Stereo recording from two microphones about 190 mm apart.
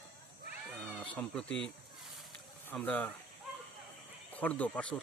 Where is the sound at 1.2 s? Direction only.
5° left (ahead or behind).